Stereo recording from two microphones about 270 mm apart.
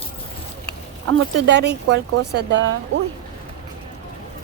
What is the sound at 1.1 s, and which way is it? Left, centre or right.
Speech, right.